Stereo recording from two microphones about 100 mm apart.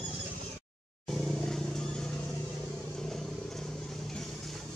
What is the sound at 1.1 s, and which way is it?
Vehicle, 5° left (ahead or behind).